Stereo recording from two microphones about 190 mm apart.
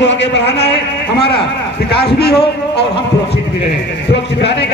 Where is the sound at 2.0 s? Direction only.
60° left (ahead or behind).